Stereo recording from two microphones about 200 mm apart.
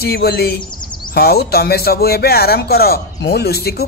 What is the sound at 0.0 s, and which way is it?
Speech, 50° left (ahead or behind).